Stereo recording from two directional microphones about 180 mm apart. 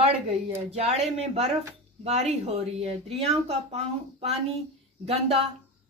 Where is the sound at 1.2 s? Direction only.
35° right (ahead or behind).